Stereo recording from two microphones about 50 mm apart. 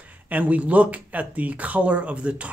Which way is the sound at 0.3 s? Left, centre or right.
Right.